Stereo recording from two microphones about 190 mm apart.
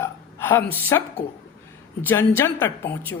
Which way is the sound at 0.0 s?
10° left (ahead or behind).